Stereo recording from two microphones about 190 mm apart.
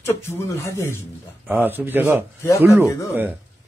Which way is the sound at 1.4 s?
10° right (ahead or behind).